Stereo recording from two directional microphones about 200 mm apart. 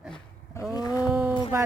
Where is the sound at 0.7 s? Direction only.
20° left (ahead or behind).